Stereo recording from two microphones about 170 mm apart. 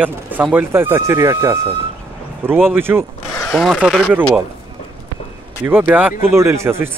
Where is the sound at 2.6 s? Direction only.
15° right (ahead or behind).